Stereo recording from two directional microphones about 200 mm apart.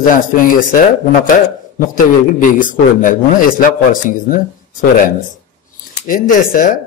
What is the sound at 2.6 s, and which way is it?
A man's voice, 45° left (ahead or behind).